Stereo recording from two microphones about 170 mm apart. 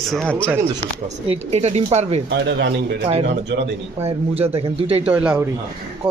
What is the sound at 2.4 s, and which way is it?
Speech, 80° right.